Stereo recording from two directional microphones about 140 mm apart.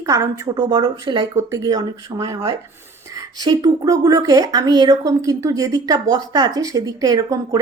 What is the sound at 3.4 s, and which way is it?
Speech, 30° right (ahead or behind).